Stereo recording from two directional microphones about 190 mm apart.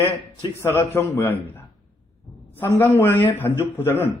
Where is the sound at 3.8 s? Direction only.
10° left (ahead or behind).